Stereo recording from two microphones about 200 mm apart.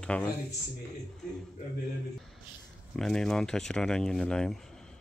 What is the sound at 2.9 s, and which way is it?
Speech, 5° left (ahead or behind).